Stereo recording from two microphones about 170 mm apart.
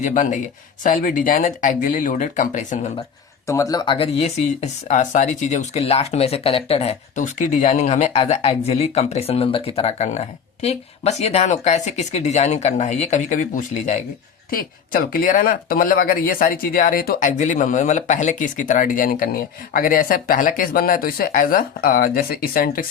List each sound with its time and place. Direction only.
0.0 s speech: 50° left (ahead or behind)
3.4 s speech: 20° left (ahead or behind); by 22.9 s 55° left (ahead or behind)